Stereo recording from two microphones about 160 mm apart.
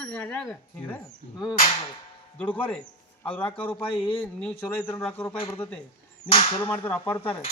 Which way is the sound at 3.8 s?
35° left (ahead or behind).